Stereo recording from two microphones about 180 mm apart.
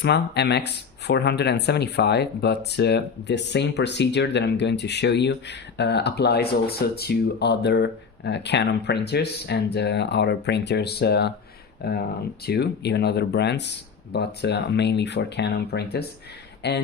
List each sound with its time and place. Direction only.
0.0 s speech: 70° left (ahead or behind)